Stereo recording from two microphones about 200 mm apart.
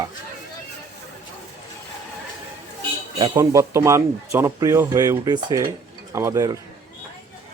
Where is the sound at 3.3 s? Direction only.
15° right (ahead or behind).